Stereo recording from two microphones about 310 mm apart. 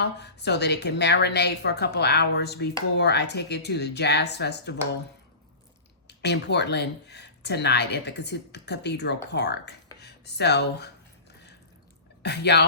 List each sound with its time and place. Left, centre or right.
0.0 s a woman's voice: left
6.1 s speech: left
12.2 s a woman's voice: left